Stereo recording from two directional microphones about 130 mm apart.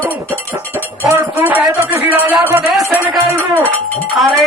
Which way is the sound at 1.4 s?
10° right (ahead or behind).